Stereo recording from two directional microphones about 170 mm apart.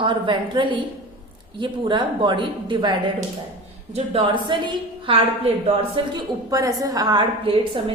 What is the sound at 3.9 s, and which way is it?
A woman's voice, 30° right (ahead or behind).